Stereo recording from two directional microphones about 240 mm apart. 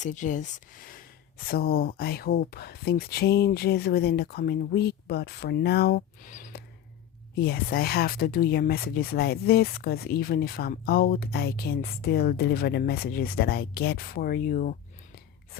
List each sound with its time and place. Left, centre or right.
0.0 s speech: left